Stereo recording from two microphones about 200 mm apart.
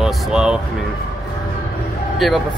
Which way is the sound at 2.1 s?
Centre (ahead or behind).